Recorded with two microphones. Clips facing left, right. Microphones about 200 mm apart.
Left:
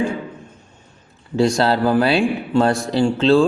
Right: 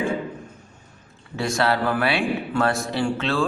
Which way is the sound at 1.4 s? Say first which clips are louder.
Left 6 dB; 30° left (ahead or behind).